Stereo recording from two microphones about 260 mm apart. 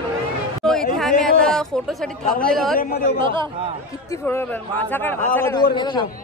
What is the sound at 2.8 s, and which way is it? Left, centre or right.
Speech, left.